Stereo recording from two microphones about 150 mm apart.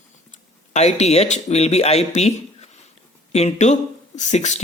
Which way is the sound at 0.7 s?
50° left (ahead or behind).